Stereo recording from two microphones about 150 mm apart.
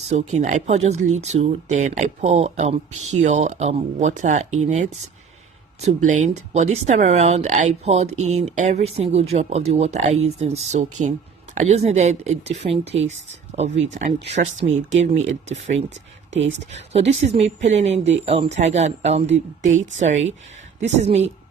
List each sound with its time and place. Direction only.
0.1 s speech: 50° right (ahead or behind)